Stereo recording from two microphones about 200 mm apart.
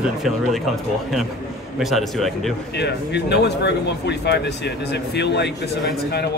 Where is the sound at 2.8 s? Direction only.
55° left (ahead or behind).